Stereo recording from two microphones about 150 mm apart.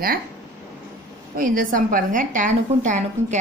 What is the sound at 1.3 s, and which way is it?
A woman's voice, 65° right (ahead or behind).